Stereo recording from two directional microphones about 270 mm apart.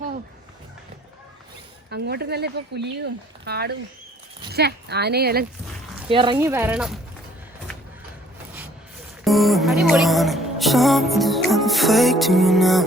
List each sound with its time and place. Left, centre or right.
1.9 s speech: right
6.1 s speech: centre
9.2 s music: centre